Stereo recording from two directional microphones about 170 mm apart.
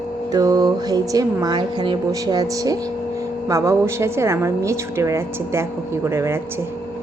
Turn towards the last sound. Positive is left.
turn(degrees=-15)  # may be behind; listen again after turning